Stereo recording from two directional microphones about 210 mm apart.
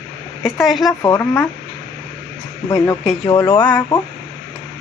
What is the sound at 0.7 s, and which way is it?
Speech, centre (ahead or behind).